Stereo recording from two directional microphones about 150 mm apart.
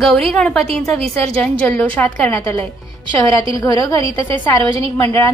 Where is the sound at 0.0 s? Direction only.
Centre (ahead or behind).